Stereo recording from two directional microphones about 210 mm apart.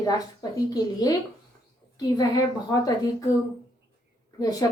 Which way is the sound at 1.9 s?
20° left (ahead or behind).